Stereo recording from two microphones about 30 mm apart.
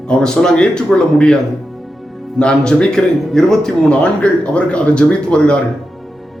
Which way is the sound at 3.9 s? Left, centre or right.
Left.